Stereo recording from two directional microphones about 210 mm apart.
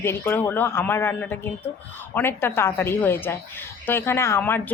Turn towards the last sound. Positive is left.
turn(degrees=10)  # may be behind; listen again after turning